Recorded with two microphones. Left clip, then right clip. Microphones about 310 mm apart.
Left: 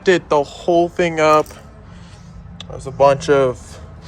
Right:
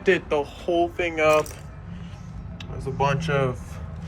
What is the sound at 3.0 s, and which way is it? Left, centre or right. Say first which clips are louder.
Speech: left 11 dB; left.